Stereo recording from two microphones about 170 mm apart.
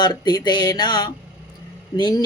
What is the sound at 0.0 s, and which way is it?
Speech, 25° left (ahead or behind).